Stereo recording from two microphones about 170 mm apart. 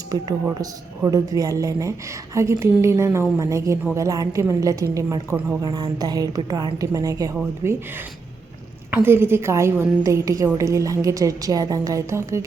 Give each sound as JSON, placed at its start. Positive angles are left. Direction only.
{"t": 0.4, "sound": "a woman's voice", "side_deg": -20}
{"t": 8.9, "sound": "a woman's voice", "side_deg": -15}